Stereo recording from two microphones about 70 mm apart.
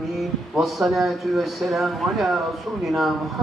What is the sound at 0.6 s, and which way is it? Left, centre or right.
A man's voice, centre.